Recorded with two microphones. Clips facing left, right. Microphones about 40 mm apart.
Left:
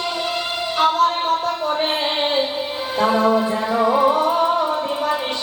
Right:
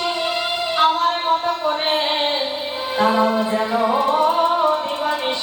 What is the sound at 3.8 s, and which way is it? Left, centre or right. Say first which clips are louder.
Music: left 2 dB; centre.